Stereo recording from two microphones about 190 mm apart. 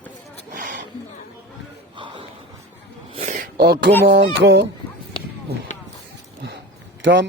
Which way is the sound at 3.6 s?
60° right (ahead or behind).